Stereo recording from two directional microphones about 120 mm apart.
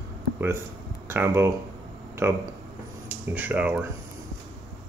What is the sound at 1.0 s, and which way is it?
Speech, 20° right (ahead or behind).